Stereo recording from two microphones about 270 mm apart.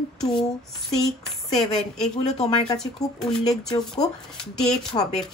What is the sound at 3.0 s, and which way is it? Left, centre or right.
Speech, centre.